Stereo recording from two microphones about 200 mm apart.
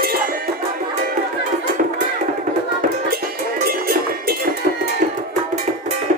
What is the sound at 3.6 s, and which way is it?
Music, 45° right (ahead or behind).